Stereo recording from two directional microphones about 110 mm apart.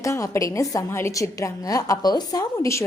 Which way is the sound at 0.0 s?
30° left (ahead or behind).